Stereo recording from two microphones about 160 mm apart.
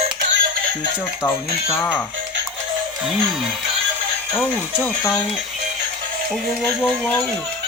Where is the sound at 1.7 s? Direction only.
10° left (ahead or behind).